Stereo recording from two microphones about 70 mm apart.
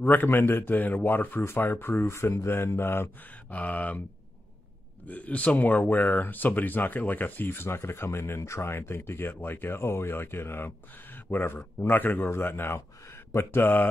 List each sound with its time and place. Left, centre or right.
0.0 s a man's voice: left
3.5 s a man's voice: left
5.0 s speech: left